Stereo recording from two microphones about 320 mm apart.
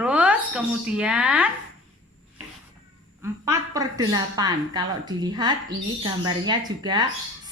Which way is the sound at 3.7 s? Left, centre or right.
Centre.